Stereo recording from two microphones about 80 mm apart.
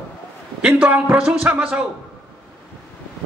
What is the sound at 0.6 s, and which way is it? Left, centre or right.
A man's voice, centre.